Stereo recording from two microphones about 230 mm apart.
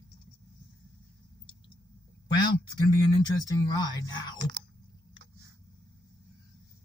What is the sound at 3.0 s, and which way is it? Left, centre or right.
Speech, centre.